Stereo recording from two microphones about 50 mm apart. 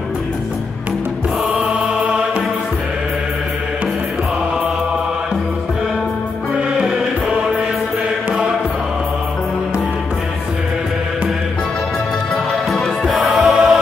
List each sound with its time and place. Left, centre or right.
1.8 s music: right
12.7 s music: centre
13.3 s choir: centre